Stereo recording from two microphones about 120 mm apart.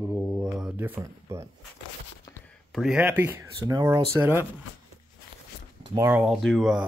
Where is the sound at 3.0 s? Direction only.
15° right (ahead or behind).